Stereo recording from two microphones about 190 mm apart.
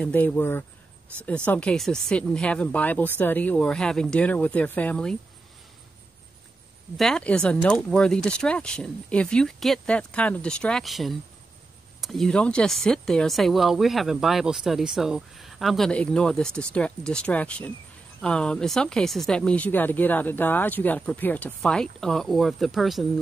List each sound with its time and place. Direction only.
0.0 s speech: 10° left (ahead or behind)
7.0 s speech: 5° left (ahead or behind)